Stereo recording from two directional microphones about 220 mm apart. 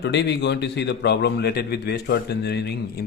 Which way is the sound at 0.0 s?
50° left (ahead or behind).